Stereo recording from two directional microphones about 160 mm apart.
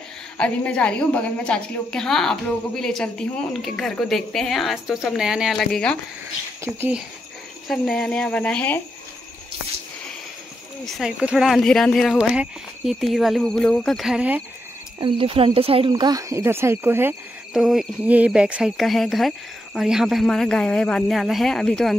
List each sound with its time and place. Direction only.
0.4 s a woman's voice: 5° left (ahead or behind)
6.6 s speech: 15° right (ahead or behind)
7.6 s speech: 5° left (ahead or behind)
10.9 s a woman's voice: 5° right (ahead or behind)
15.0 s speech: 30° right (ahead or behind)
15.9 s speech: 25° right (ahead or behind)
17.5 s a woman's voice: centre (ahead or behind)